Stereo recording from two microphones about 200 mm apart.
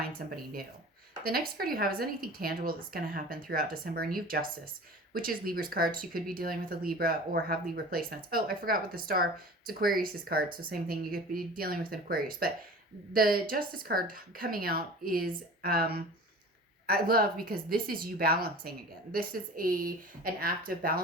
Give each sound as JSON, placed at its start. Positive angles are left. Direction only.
{"t": 0.2, "sound": "speech", "side_deg": -45}